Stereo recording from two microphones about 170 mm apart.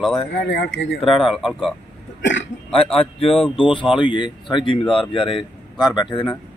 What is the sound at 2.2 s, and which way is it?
Throat clearing, 90° left.